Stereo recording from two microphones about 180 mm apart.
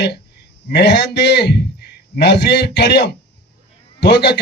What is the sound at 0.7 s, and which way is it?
A man's voice, 75° left (ahead or behind).